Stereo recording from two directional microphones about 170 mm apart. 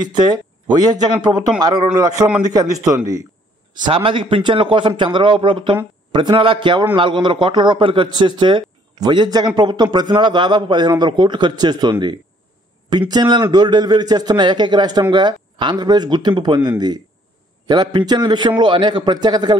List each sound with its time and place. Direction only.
0.0 s a man's voice: 25° right (ahead or behind)
3.8 s a man's voice: 30° right (ahead or behind)